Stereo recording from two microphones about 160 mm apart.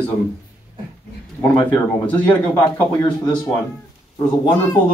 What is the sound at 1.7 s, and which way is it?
Speech, 10° left (ahead or behind).